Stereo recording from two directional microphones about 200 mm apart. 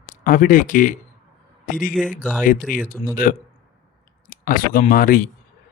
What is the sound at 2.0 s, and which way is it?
Speech, 5° left (ahead or behind).